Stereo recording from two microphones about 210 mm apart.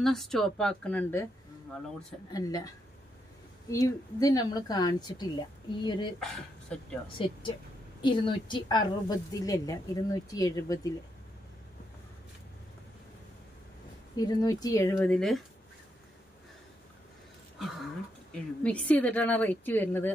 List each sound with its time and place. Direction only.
0.0 s speech: centre (ahead or behind)
2.3 s speech: 15° left (ahead or behind)
3.7 s a woman's voice: 15° left (ahead or behind)
6.1 s speech: centre (ahead or behind)
7.2 s a woman's voice: 25° left (ahead or behind)
14.1 s speech: 15° left (ahead or behind); by 15.4 s centre (ahead or behind)
18.3 s speech: 5° left (ahead or behind)